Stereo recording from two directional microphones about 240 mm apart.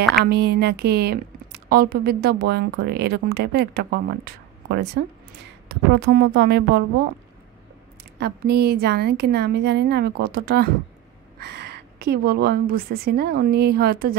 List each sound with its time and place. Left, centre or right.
0.2 s a woman's voice: right
8.2 s a woman's voice: right